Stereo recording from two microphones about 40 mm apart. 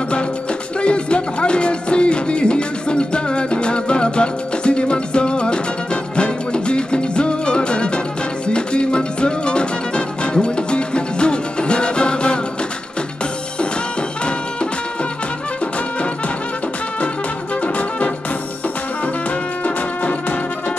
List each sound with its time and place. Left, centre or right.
0.7 s music: left
17.6 s music: left
19.6 s music: left